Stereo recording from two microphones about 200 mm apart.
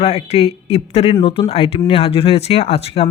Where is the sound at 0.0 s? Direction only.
30° left (ahead or behind).